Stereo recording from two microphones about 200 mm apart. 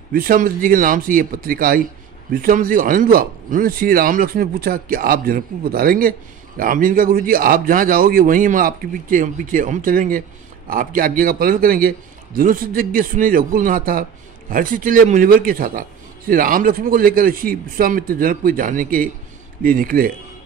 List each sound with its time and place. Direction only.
0.1 s a man's voice: 45° right (ahead or behind)